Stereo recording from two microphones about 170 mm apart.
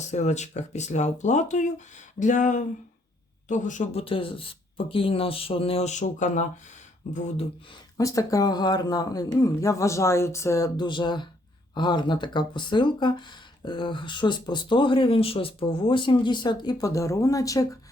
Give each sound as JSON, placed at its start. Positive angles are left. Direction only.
{"t": 0.0, "sound": "speech", "side_deg": 45}
{"t": 4.0, "sound": "speech", "side_deg": 30}
{"t": 7.9, "sound": "speech", "side_deg": 20}